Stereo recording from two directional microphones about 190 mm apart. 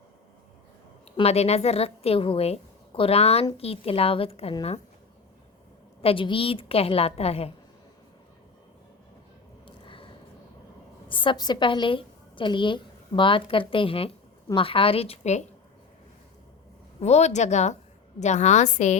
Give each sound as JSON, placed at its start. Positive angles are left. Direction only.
{"t": 1.1, "sound": "a woman's voice", "side_deg": 30}
{"t": 6.0, "sound": "a woman's voice", "side_deg": 30}
{"t": 9.6, "sound": "a sound", "side_deg": 25}
{"t": 11.1, "sound": "a woman's voice", "side_deg": 25}
{"t": 17.0, "sound": "a woman's voice", "side_deg": 35}